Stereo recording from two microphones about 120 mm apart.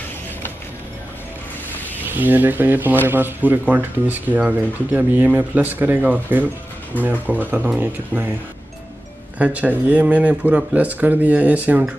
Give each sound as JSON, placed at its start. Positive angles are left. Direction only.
{"t": 2.0, "sound": "speech", "side_deg": -15}
{"t": 9.4, "sound": "speech", "side_deg": -10}